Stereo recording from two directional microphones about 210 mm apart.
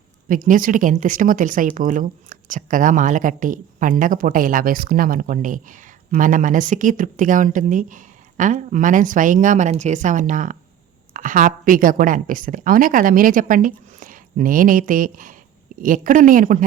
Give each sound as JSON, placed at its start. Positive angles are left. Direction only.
{"t": 0.3, "sound": "speech", "side_deg": -40}